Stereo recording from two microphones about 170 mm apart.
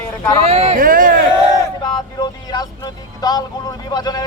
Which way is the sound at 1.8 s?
25° left (ahead or behind).